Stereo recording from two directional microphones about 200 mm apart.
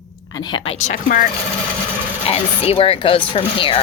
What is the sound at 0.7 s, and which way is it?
Speech, 35° left (ahead or behind).